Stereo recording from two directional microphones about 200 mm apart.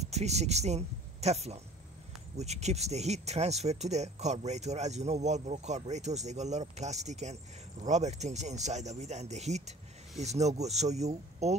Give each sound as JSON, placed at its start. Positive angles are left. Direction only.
{"t": 0.0, "sound": "speech", "side_deg": -35}